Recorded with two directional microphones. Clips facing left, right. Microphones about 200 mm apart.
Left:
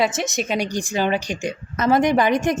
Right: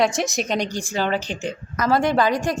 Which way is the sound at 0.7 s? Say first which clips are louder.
Left 2 dB; 15° left (ahead or behind).